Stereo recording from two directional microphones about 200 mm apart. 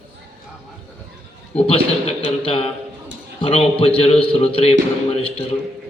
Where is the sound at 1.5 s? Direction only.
30° left (ahead or behind).